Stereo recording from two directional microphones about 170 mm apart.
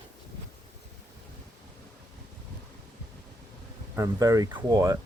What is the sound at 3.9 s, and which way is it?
Speech, 20° right (ahead or behind).